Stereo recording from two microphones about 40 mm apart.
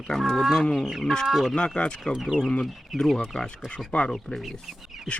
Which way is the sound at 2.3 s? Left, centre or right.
Right.